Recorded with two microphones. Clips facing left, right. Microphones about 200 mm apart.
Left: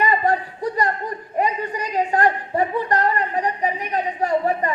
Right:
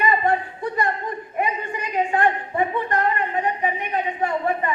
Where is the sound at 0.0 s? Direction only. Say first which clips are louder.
Left 1 dB; 40° left (ahead or behind).